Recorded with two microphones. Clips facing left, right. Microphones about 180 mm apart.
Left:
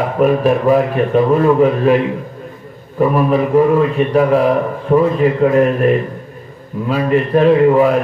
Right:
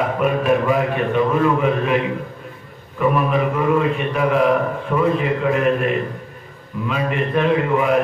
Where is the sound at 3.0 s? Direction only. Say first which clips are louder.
Left 5 dB; 35° left (ahead or behind).